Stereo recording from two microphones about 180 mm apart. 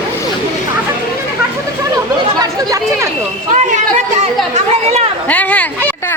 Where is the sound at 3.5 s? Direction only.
40° right (ahead or behind).